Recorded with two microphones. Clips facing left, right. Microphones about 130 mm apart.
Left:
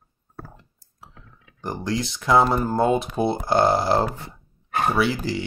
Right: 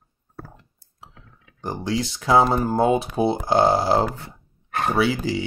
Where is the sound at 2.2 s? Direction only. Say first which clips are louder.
Right 1 dB; 15° right (ahead or behind).